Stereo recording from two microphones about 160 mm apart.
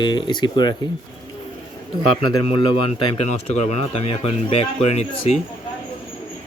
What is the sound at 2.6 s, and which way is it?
Speech, 35° left (ahead or behind).